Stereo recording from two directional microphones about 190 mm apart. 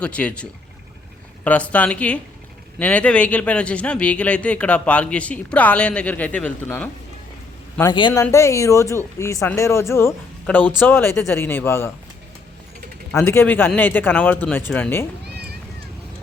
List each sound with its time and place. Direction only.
0.0 s speech: 5° left (ahead or behind)
1.5 s speech: 5° left (ahead or behind)
7.8 s a man's voice: 20° left (ahead or behind)
13.1 s speech: 10° left (ahead or behind)